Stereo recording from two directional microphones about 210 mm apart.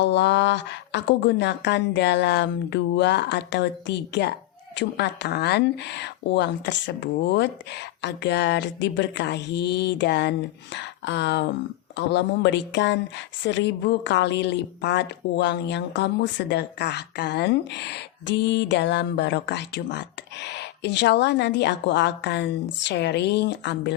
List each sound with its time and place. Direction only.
0.0 s speech: 55° left (ahead or behind)